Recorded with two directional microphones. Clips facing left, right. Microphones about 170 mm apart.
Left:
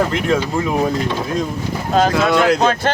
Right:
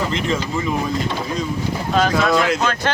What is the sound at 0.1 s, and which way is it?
Speech, 55° left (ahead or behind).